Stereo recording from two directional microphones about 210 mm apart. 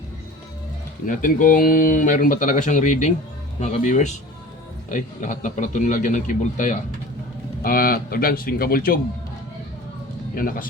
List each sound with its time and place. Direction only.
1.0 s speech: 40° left (ahead or behind)
10.3 s speech: 40° left (ahead or behind)